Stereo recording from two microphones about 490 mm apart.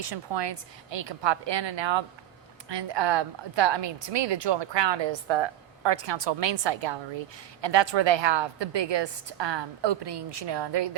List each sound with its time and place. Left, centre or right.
0.0 s a woman's voice: right